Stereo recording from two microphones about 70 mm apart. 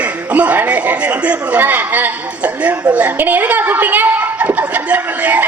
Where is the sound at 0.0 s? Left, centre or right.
Right.